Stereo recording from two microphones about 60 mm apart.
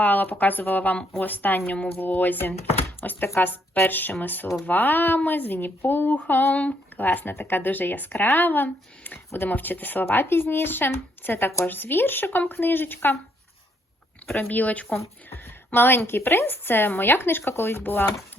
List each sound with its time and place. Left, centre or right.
0.0 s speech: left
14.3 s speech: left
15.3 s a sound: left
16.0 s speech: left